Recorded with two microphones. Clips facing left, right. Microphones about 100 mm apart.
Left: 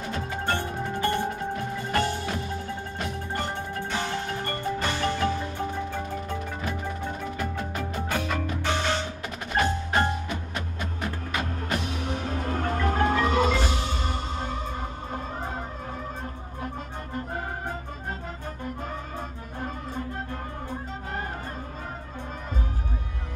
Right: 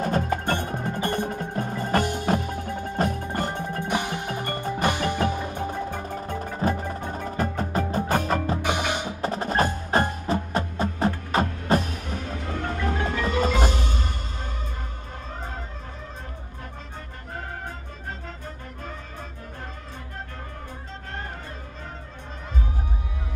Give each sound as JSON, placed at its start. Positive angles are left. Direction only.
{"t": 0.0, "sound": "music", "side_deg": -50}
{"t": 0.6, "sound": "music", "side_deg": -15}
{"t": 1.1, "sound": "percussion", "side_deg": -45}
{"t": 2.3, "sound": "music", "side_deg": -40}
{"t": 3.0, "sound": "percussion", "side_deg": -40}
{"t": 3.5, "sound": "music", "side_deg": -15}
{"t": 5.9, "sound": "music", "side_deg": -50}
{"t": 8.6, "sound": "music", "side_deg": -15}
{"t": 9.2, "sound": "music", "side_deg": -35}
{"t": 12.4, "sound": "music", "side_deg": 45}